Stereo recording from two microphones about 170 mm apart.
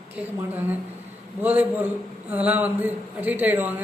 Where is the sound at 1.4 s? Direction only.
10° right (ahead or behind).